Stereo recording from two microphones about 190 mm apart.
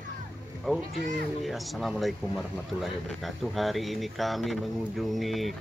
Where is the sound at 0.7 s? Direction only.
Centre (ahead or behind).